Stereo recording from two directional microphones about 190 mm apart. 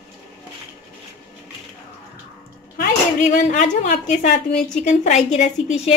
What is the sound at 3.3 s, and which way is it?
A woman's voice, 40° left (ahead or behind).